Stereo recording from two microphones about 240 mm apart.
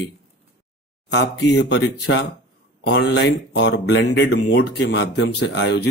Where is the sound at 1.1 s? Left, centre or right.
Left.